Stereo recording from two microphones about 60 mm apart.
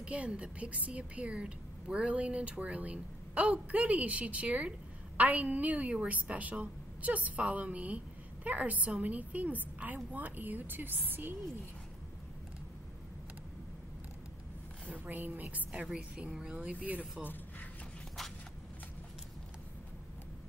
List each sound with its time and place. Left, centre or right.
0.0 s speech: centre
14.9 s speech: right
15.7 s speech: centre
17.2 s a sound: left